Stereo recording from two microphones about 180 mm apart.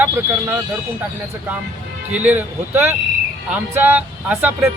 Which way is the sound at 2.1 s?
10° right (ahead or behind).